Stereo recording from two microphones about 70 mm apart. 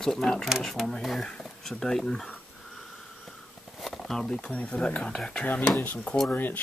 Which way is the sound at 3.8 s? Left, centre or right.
Centre.